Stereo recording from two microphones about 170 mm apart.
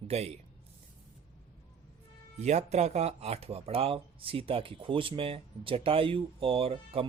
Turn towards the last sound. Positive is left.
turn(degrees=-35)  # may be behind; listen again after turning